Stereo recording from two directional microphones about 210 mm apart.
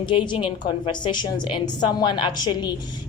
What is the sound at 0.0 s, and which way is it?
A woman's voice, 20° left (ahead or behind).